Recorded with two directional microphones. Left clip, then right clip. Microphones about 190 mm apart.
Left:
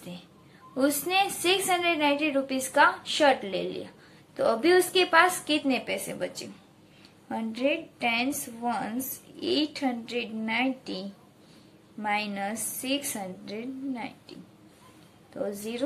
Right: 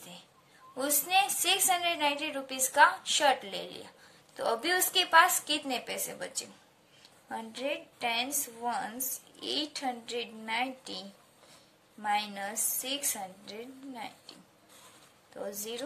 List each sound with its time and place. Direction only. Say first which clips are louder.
0.7 s a woman's voice: left 3 dB; 20° right (ahead or behind)
15.3 s a woman's voice: left 5 dB; 20° right (ahead or behind)